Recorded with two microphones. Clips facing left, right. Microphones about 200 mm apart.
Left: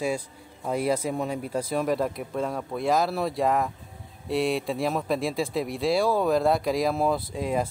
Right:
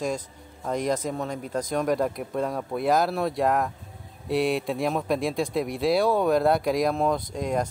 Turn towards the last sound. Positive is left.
turn(degrees=5)  # may be behind; listen again after turning